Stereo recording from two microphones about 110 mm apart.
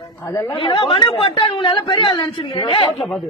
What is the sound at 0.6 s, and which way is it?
Speech, 55° left (ahead or behind).